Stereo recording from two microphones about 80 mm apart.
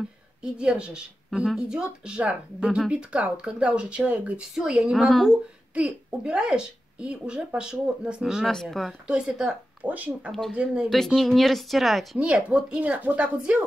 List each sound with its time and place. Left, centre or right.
0.4 s speech: centre
8.5 s speech: centre
9.0 s speech: centre
9.8 s speech: right
11.1 s speech: centre
12.2 s speech: centre